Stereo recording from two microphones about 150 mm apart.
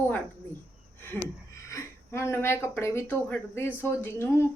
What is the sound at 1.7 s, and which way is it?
Speech, 20° left (ahead or behind).